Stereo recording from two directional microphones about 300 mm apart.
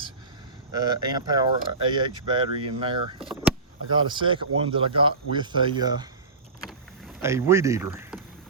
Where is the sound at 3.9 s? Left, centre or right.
Centre.